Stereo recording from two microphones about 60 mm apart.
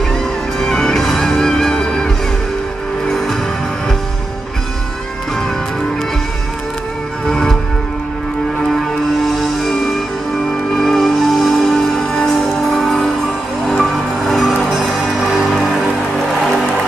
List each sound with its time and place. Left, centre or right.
0.1 s music: centre
7.2 s music: centre
8.7 s music: centre